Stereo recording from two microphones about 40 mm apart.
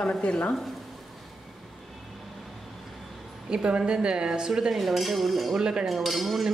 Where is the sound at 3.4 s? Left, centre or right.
Right.